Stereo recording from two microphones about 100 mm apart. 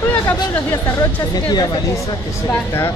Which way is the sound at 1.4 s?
45° left (ahead or behind).